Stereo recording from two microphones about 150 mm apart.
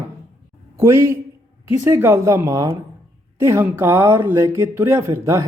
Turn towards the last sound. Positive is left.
turn(degrees=-20)  # may be behind; listen again after turning